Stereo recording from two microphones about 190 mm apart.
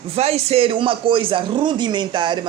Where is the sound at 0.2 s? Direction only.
35° right (ahead or behind).